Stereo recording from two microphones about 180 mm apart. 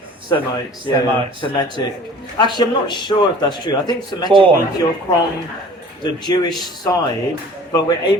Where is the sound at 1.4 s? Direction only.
25° left (ahead or behind).